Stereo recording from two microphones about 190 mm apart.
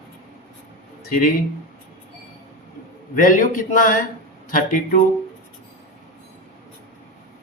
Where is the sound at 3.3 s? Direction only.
45° left (ahead or behind).